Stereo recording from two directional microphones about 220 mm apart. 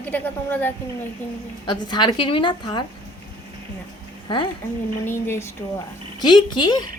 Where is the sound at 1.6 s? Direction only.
20° left (ahead or behind).